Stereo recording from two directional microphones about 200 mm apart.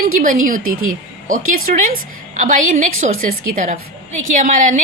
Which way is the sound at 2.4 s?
35° right (ahead or behind).